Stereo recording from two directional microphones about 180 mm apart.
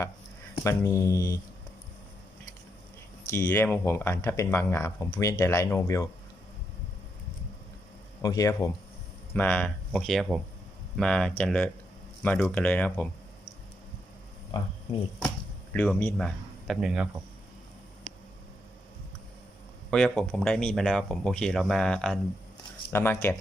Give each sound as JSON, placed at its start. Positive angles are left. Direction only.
{"t": 0.6, "sound": "speech", "side_deg": 15}
{"t": 3.2, "sound": "speech", "side_deg": 10}
{"t": 8.2, "sound": "speech", "side_deg": 20}
{"t": 15.7, "sound": "speech", "side_deg": 10}
{"t": 19.9, "sound": "speech", "side_deg": 5}